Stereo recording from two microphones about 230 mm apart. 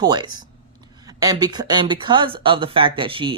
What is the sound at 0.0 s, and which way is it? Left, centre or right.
Speech, centre.